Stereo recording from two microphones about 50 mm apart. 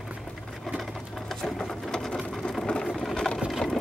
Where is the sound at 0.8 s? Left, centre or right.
Centre.